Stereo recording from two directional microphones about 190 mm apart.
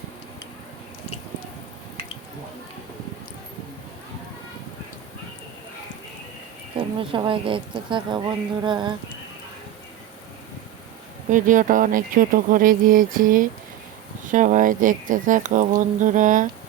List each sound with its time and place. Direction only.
6.7 s speech: 25° right (ahead or behind)
11.3 s speech: 45° right (ahead or behind)